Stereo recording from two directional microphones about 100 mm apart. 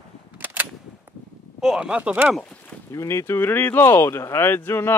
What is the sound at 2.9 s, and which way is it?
Speech, 30° left (ahead or behind).